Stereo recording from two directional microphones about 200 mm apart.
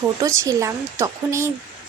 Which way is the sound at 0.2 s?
15° right (ahead or behind).